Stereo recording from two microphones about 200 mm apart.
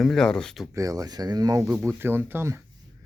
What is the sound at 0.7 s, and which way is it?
Speech, 15° right (ahead or behind).